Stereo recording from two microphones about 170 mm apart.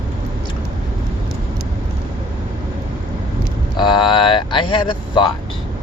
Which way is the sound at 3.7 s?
25° left (ahead or behind).